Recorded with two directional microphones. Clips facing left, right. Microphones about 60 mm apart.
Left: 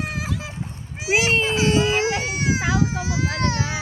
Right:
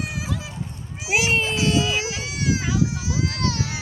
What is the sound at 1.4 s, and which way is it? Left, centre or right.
Baby cry, left.